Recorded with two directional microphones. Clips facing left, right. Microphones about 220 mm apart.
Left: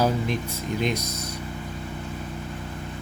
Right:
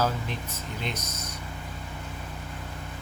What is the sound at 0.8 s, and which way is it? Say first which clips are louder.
Speech: left 8 dB; 15° left (ahead or behind).